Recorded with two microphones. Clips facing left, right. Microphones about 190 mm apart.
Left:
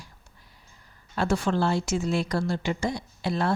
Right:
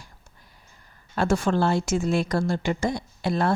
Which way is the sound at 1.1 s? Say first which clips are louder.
Right 2 dB; 50° right (ahead or behind).